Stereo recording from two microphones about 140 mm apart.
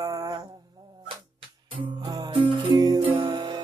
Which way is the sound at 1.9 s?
30° right (ahead or behind).